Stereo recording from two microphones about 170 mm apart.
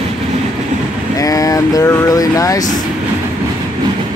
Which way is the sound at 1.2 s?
20° left (ahead or behind).